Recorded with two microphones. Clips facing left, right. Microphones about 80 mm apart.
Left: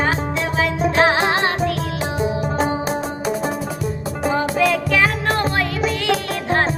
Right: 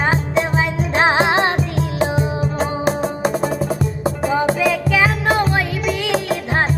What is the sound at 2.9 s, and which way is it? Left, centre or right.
Music, right.